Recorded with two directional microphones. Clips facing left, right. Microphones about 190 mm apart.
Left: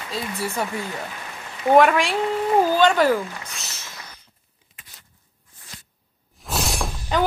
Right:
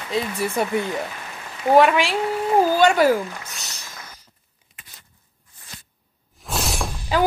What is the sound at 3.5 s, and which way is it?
Speech, centre (ahead or behind).